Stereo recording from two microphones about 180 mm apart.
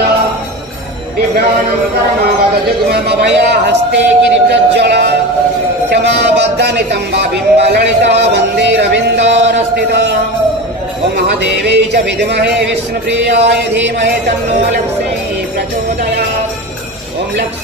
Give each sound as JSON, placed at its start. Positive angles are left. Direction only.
{"t": 2.9, "sound": "speech", "side_deg": -65}
{"t": 11.2, "sound": "speech", "side_deg": -70}